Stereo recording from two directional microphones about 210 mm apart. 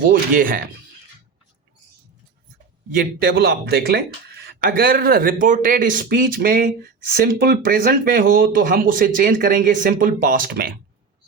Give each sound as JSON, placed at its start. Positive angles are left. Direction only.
{"t": 0.0, "sound": "speech", "side_deg": -40}
{"t": 2.9, "sound": "speech", "side_deg": -45}